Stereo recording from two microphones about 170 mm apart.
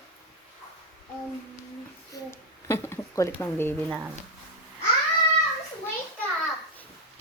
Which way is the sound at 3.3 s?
15° left (ahead or behind).